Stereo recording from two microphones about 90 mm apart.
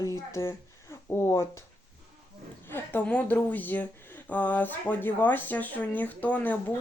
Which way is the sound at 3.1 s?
15° left (ahead or behind).